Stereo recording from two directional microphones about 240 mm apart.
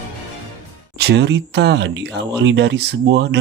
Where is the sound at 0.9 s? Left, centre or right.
Right.